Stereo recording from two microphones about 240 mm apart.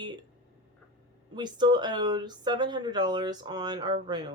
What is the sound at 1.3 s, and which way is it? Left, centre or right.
Speech, centre.